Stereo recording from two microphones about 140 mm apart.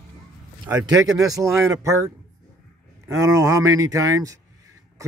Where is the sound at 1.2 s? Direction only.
25° right (ahead or behind).